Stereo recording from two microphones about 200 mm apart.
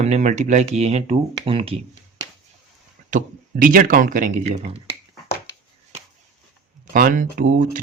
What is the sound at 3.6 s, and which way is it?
Speech, 45° right (ahead or behind).